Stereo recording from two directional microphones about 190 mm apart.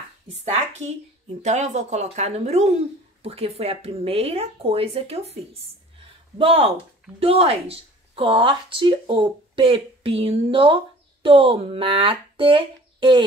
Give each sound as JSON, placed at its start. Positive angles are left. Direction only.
{"t": 0.3, "sound": "speech", "side_deg": -35}